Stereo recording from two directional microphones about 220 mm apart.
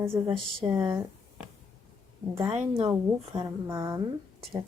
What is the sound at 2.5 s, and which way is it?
Speech, 25° right (ahead or behind).